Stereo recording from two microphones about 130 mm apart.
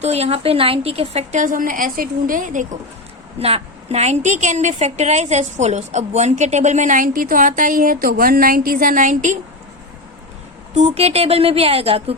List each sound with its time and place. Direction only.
0.0 s a woman's voice: 55° right (ahead or behind); by 2.6 s 85° right
3.3 s a woman's voice: 50° right (ahead or behind); by 9.4 s 75° right (ahead or behind)
10.8 s speech: 50° right (ahead or behind)